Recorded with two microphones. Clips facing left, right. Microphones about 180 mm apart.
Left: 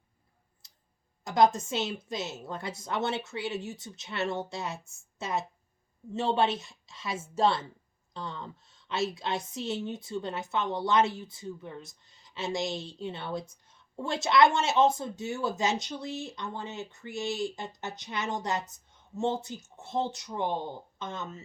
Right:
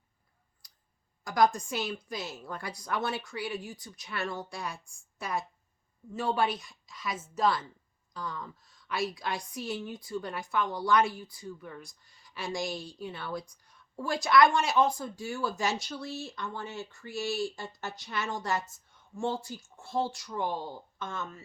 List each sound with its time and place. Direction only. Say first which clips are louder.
0.6 s tick: left 2 dB; 25° left (ahead or behind)
1.2 s a woman's voice: left 2 dB; 25° left (ahead or behind)